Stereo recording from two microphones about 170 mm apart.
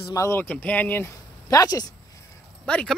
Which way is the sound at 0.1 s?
15° left (ahead or behind).